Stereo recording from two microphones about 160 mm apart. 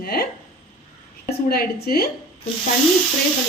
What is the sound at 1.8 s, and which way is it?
Speech, 70° left (ahead or behind).